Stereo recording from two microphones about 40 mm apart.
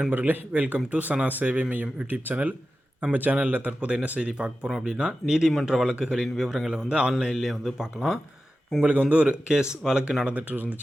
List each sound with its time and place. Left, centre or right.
0.1 s a man's voice: right; by 6.2 s centre
6.2 s speech: centre; by 7.1 s right
7.1 s speech: centre
8.8 s a man's voice: right
9.3 s speech: centre
10.2 s speech: right